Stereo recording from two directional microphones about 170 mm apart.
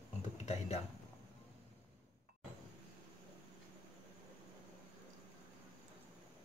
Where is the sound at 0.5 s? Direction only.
40° left (ahead or behind).